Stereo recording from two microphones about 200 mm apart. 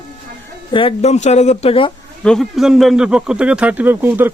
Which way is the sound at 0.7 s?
25° left (ahead or behind).